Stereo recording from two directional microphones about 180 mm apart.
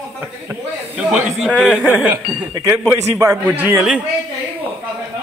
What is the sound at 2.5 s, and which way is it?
A man's voice, 15° right (ahead or behind).